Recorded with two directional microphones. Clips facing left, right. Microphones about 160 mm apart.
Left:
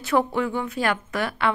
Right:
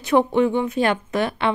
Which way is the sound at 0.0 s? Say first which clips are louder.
Right 5 dB; 20° right (ahead or behind).